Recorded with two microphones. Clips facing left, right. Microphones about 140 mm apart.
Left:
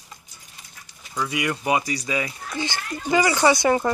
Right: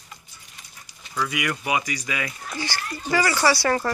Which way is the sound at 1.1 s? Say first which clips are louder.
Left 1 dB; 25° left (ahead or behind).